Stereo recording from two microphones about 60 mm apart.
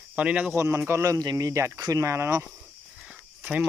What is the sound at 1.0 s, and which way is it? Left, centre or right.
Speech, right.